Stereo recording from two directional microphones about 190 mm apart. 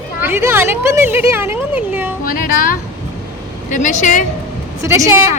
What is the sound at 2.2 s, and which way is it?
A woman's voice, 50° left (ahead or behind).